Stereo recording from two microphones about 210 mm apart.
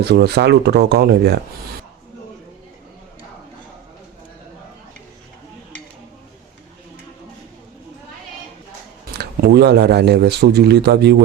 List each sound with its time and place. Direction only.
0.0 s speech: 50° right (ahead or behind)
9.1 s speech: 50° right (ahead or behind)